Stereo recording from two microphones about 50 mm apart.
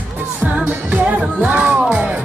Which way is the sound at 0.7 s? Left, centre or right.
Right.